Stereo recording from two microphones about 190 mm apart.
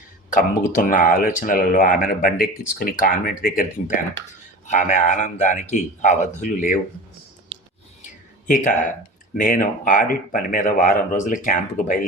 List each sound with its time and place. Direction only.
0.3 s speech: 45° left (ahead or behind)
8.0 s a sound: 40° left (ahead or behind)
9.4 s speech: 45° left (ahead or behind)